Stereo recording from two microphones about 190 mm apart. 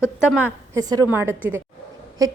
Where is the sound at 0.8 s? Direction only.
20° right (ahead or behind).